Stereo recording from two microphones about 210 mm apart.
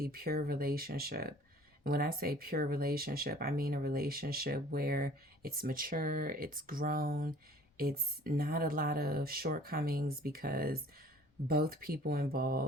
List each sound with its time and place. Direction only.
0.0 s speech: 45° right (ahead or behind)